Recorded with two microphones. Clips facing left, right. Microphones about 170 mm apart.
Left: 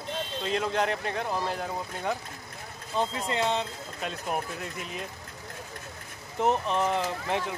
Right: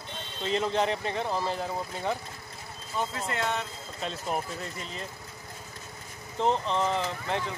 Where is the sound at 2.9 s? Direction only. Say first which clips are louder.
Left 3 dB; 20° left (ahead or behind).